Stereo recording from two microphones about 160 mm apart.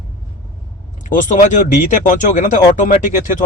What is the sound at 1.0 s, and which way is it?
Speech, 55° left (ahead or behind).